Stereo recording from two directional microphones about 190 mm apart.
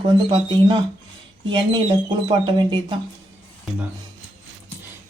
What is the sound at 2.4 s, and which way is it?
Speech, 25° right (ahead or behind).